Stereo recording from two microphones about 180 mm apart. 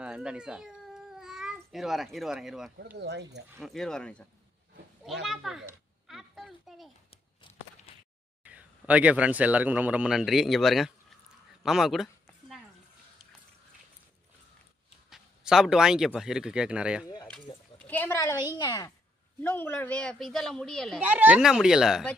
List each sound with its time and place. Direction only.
0.0 s speech: 5° right (ahead or behind)
3.0 s speech: 70° right (ahead or behind)
3.6 s speech: centre (ahead or behind)
5.2 s a sound: centre (ahead or behind)
7.4 s walk: 25° left (ahead or behind)
7.9 s a sound: 35° left (ahead or behind)
8.5 s a man's voice: 5° right (ahead or behind)
11.6 s a sound: centre (ahead or behind)
15.0 s speech: centre (ahead or behind)
17.7 s a woman's voice: 10° left (ahead or behind)
21.0 s speech: 10° right (ahead or behind)